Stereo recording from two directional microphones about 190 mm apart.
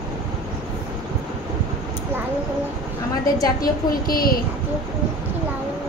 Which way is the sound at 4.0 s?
50° left (ahead or behind).